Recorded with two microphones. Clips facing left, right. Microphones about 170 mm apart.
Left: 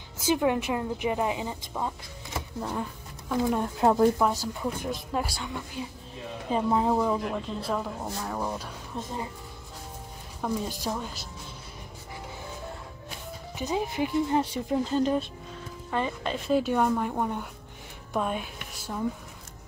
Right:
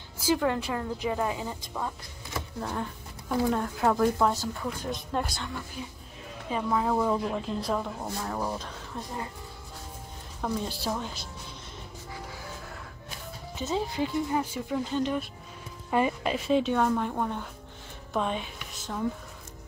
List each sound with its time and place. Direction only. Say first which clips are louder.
0.2 s a woman's voice: left 1 dB; 20° left (ahead or behind)
2.6 s speech: left 1 dB; 5° left (ahead or behind)
3.6 s speech: left 3 dB; 25° left (ahead or behind)
4.2 s a woman's voice: even; 10° left (ahead or behind)
6.5 s speech: left 3 dB; 25° left (ahead or behind)
7.0 s speech: even; centre (ahead or behind)
8.9 s speech: left 2 dB; 20° left (ahead or behind)
10.4 s a woman's voice: left 1 dB; 5° left (ahead or behind)
13.6 s a woman's voice: left 1 dB; 15° left (ahead or behind)
14.7 s speech: left 4 dB; 40° left (ahead or behind)
15.9 s speech: right 3 dB; 10° right (ahead or behind)
16.4 s a woman's voice: left 1 dB; 5° left (ahead or behind)